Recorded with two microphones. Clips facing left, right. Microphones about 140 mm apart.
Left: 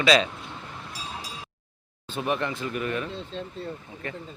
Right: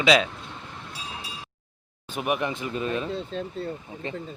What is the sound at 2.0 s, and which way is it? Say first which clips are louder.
Speech: right 1 dB; 15° right (ahead or behind).